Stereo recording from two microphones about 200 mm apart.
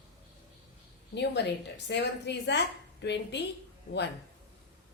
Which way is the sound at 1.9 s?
60° left (ahead or behind).